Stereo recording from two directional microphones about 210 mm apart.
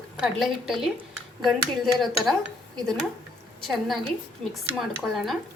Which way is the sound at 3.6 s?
Centre (ahead or behind).